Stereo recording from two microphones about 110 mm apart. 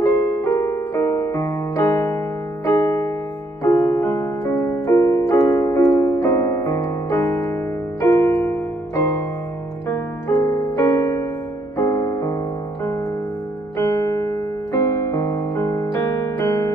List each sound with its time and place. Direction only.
0.4 s piano: 25° left (ahead or behind)
3.6 s music: 30° left (ahead or behind)
9.8 s piano: 25° left (ahead or behind)
11.8 s music: 30° left (ahead or behind)
13.7 s music: 30° left (ahead or behind)